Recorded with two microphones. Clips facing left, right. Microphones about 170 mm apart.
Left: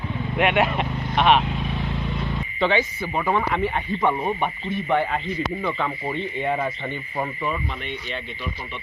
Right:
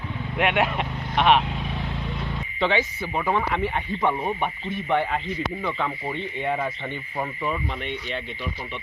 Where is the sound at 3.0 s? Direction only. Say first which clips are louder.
Left 1 dB; 5° right (ahead or behind).